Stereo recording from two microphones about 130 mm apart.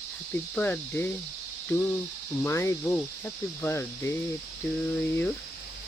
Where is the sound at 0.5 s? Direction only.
15° left (ahead or behind).